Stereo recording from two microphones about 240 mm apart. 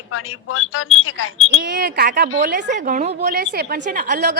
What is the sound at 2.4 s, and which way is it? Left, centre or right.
A woman's voice, right.